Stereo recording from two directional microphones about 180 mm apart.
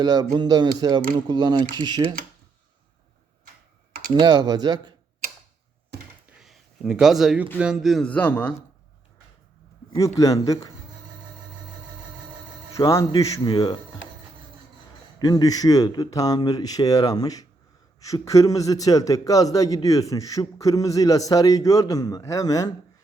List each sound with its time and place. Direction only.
0.0 s speech: 20° right (ahead or behind)
4.1 s speech: 25° right (ahead or behind)
5.9 s a sound: 65° right (ahead or behind)
6.4 s a sound: centre (ahead or behind)
7.6 s a man's voice: centre (ahead or behind)
10.0 s a man's voice: 20° left (ahead or behind)
12.7 s a man's voice: 15° left (ahead or behind)
15.2 s a man's voice: 20° left (ahead or behind)